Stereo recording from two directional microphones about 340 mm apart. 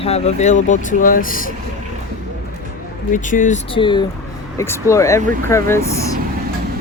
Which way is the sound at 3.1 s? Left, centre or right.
Left.